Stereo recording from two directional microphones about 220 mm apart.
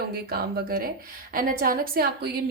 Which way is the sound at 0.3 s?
45° right (ahead or behind).